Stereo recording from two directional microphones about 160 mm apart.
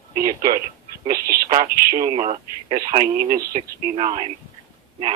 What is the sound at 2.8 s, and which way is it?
Speech, 75° right (ahead or behind).